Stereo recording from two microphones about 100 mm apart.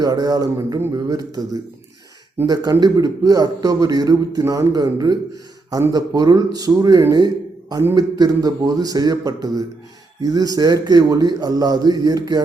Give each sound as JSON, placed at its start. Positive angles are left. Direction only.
{"t": 0.0, "sound": "a man's voice", "side_deg": -40}
{"t": 2.5, "sound": "a man's voice", "side_deg": -40}
{"t": 7.1, "sound": "a sound", "side_deg": -40}
{"t": 7.9, "sound": "a man's voice", "side_deg": -40}